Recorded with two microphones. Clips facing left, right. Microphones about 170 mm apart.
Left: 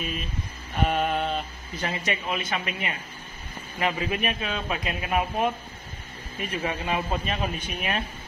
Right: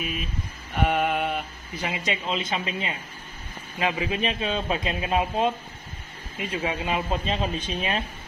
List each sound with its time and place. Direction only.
0.8 s a man's voice: 10° right (ahead or behind)